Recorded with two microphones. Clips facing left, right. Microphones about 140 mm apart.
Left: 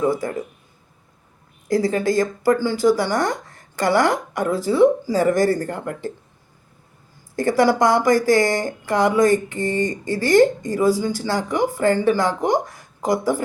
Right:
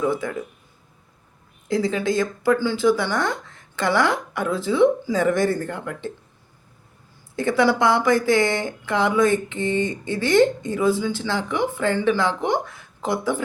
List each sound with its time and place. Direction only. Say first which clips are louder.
0.0 s speech: left 2 dB; 40° left (ahead or behind)
1.6 s speech: left 3 dB; 45° left (ahead or behind)
7.3 s speech: left 2 dB; 45° left (ahead or behind)